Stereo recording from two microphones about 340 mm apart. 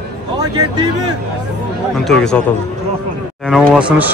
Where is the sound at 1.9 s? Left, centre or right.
Centre.